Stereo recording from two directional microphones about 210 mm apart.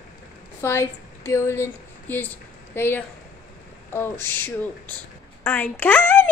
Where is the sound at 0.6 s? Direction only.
10° left (ahead or behind).